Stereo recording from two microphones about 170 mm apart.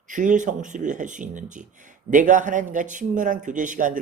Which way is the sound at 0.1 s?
50° right (ahead or behind).